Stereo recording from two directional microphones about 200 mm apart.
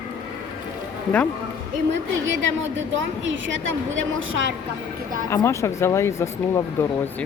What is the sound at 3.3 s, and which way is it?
Speech, 70° right (ahead or behind).